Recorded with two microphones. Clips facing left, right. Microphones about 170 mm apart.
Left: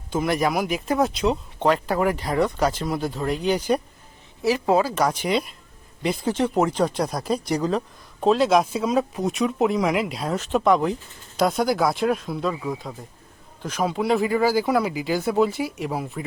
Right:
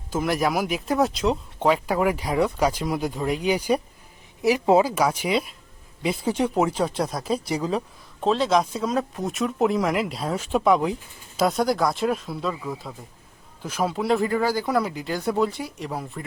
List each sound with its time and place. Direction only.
0.1 s speech: centre (ahead or behind); by 4.9 s 20° right (ahead or behind)
4.9 s speech: 10° right (ahead or behind)